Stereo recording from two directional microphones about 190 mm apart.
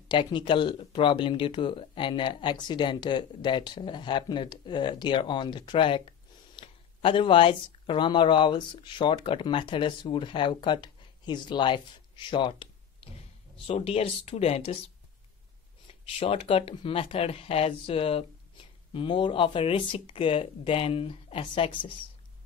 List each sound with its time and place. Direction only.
0.1 s speech: 25° left (ahead or behind)
15.9 s speech: 30° left (ahead or behind)